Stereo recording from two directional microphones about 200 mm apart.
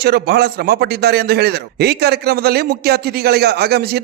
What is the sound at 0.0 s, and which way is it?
A man's voice, 55° right (ahead or behind).